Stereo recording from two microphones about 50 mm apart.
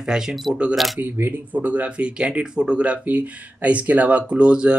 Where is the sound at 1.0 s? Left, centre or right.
Right.